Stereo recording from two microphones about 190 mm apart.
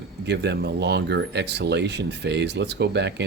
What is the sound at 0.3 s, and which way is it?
Speech, 60° right (ahead or behind).